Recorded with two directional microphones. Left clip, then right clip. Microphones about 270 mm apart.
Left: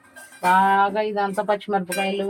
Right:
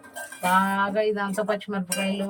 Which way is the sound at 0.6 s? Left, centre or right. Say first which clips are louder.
Left 5 dB; left.